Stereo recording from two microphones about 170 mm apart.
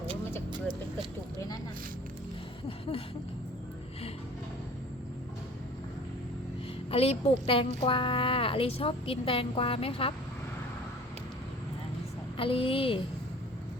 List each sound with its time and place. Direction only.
2.6 s a sound: 35° left (ahead or behind)
6.9 s a woman's voice: 35° left (ahead or behind)
12.4 s a woman's voice: 30° left (ahead or behind)